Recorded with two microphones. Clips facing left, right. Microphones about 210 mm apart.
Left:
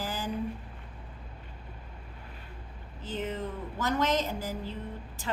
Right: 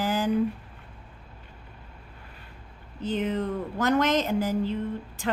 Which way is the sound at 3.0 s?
70° right (ahead or behind).